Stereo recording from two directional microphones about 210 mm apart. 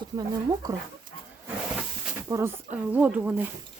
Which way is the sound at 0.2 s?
15° right (ahead or behind).